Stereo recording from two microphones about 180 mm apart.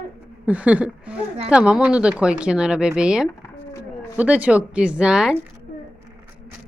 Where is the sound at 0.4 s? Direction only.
10° right (ahead or behind).